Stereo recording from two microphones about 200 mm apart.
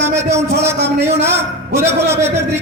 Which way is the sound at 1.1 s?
10° right (ahead or behind).